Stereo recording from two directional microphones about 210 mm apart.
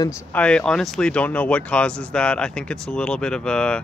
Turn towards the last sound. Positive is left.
turn(degrees=5)  # may be behind; listen again after turning